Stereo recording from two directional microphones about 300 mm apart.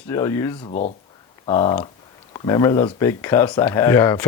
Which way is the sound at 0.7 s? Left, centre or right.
Left.